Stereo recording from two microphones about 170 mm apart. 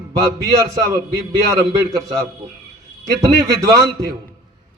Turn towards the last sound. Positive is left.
turn(degrees=-20)  # may be behind; listen again after turning